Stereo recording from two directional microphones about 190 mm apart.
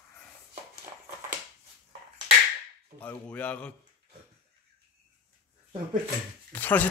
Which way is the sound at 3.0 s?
5° left (ahead or behind).